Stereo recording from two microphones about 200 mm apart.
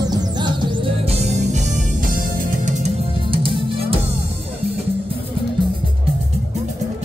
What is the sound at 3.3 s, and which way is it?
Music, 25° right (ahead or behind).